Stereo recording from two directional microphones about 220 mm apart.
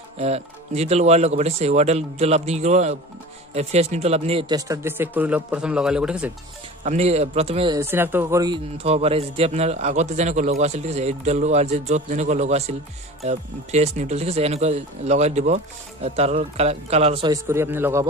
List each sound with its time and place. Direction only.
0.2 s speech: 30° right (ahead or behind); by 6.3 s 5° right (ahead or behind)
6.8 s speech: 30° right (ahead or behind)
7.8 s speech: 10° right (ahead or behind)
8.8 s a man's voice: 25° right (ahead or behind); by 18.0 s 10° right (ahead or behind)